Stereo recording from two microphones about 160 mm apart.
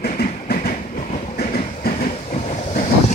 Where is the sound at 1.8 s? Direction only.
80° left.